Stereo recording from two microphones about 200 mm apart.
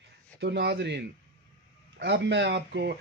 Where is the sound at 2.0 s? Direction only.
60° right (ahead or behind).